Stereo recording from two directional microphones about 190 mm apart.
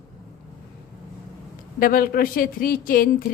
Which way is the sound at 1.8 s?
50° left (ahead or behind).